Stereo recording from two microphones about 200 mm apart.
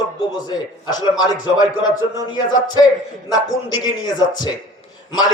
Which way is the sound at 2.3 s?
20° left (ahead or behind).